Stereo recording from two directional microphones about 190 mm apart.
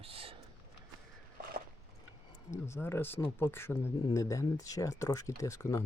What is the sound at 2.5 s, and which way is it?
Speech, 15° left (ahead or behind).